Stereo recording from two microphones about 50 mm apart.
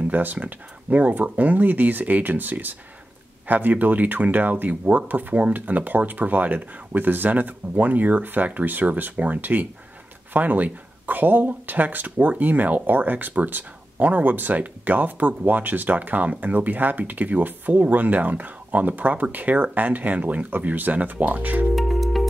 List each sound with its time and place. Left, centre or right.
0.1 s speech: right
21.7 s music: centre